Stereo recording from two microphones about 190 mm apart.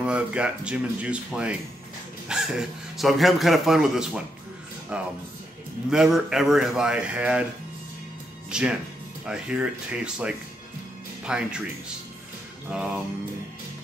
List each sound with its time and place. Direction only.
0.0 s a man's voice: 5° right (ahead or behind)
2.2 s a sound: 5° right (ahead or behind)
3.0 s a man's voice: centre (ahead or behind)
8.5 s a man's voice: 5° right (ahead or behind)